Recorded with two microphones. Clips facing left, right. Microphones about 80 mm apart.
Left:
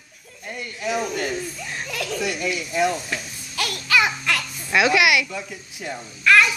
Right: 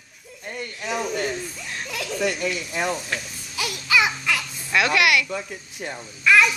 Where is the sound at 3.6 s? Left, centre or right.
Centre.